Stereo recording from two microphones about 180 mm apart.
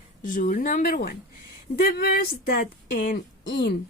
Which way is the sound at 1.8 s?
65° left (ahead or behind).